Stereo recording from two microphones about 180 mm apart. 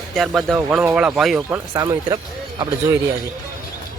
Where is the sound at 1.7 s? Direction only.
20° right (ahead or behind).